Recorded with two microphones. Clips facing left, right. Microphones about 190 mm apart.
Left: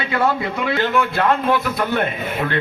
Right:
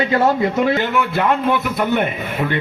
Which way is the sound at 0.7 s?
20° right (ahead or behind).